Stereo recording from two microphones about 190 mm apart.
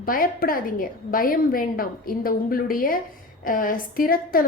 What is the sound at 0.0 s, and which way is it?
A woman's voice, 50° left (ahead or behind).